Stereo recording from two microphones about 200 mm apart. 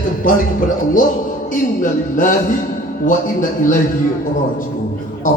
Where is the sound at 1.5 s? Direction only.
40° left (ahead or behind).